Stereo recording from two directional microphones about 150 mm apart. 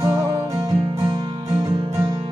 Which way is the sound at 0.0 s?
20° right (ahead or behind).